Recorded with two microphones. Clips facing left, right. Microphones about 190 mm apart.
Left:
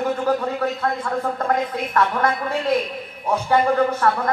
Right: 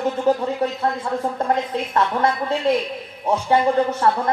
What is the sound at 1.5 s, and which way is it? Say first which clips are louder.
A woman's voice: even; 25° right (ahead or behind).